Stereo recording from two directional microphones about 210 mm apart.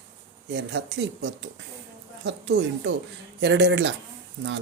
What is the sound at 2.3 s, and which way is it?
Speech, 60° right (ahead or behind).